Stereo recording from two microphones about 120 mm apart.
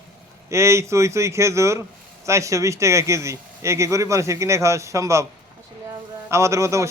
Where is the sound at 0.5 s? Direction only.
25° right (ahead or behind).